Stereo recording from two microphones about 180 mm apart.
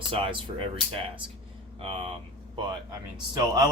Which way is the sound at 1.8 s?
30° right (ahead or behind).